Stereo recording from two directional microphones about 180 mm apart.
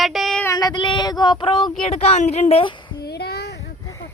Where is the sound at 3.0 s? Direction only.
65° left (ahead or behind).